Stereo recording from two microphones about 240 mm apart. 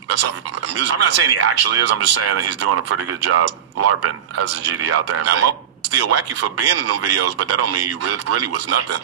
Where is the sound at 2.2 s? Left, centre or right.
Right.